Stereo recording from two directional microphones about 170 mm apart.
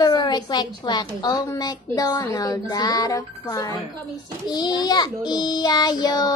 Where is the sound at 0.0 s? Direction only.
25° left (ahead or behind).